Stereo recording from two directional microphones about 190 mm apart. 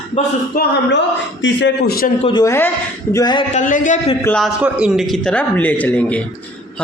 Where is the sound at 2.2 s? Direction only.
20° left (ahead or behind).